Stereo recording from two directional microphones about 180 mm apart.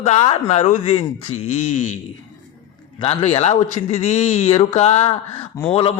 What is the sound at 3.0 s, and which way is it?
A man's voice, 35° left (ahead or behind).